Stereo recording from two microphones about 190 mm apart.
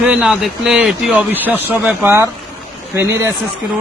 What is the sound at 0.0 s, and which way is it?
A man's voice, 5° right (ahead or behind).